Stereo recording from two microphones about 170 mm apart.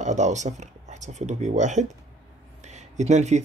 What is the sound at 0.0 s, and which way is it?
Speech, 45° right (ahead or behind).